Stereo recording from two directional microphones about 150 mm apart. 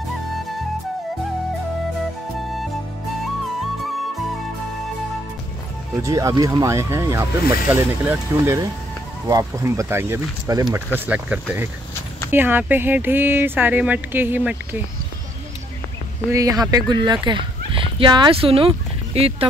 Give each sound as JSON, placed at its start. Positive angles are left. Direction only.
{"t": 6.0, "sound": "speech", "side_deg": -25}
{"t": 11.1, "sound": "speech", "side_deg": -10}
{"t": 16.3, "sound": "speech", "side_deg": -25}